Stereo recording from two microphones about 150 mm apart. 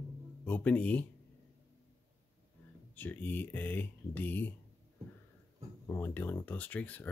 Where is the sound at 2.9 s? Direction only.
10° left (ahead or behind).